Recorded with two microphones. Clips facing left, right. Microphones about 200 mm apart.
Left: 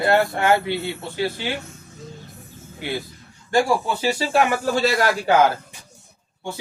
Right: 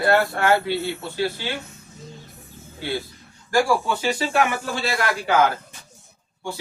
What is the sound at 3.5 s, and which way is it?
A man's voice, 25° left (ahead or behind).